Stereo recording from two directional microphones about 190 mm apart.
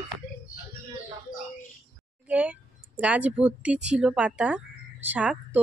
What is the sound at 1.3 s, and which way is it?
Bird, 90° left.